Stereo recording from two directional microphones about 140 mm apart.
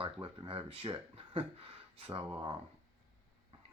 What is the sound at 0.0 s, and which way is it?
Speech, 40° right (ahead or behind).